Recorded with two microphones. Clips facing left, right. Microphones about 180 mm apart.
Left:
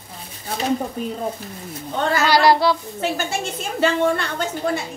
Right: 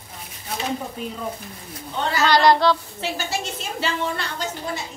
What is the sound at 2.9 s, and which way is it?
A woman's voice, 50° left (ahead or behind).